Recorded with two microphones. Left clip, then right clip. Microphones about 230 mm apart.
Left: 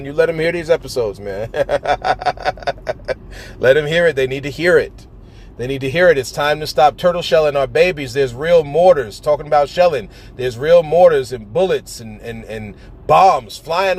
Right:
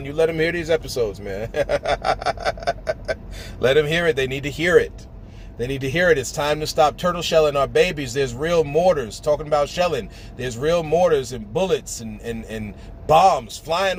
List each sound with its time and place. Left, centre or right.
0.0 s speech: left
3.8 s speech: centre
13.1 s speech: centre